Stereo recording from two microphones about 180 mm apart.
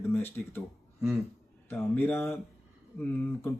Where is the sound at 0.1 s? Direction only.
10° left (ahead or behind).